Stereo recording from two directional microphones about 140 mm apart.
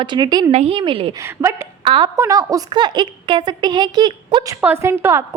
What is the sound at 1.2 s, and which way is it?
Speech, 20° right (ahead or behind).